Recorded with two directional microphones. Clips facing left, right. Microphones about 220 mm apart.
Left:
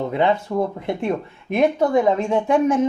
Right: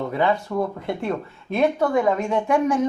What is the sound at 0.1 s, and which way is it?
Speech, 20° left (ahead or behind).